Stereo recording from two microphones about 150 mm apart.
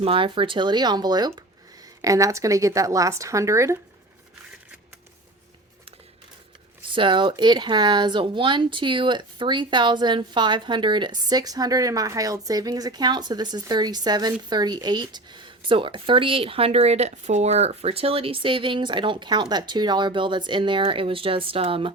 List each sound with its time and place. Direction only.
0.0 s speech: 35° right (ahead or behind); by 3.8 s 20° right (ahead or behind)
6.9 s speech: 35° right (ahead or behind)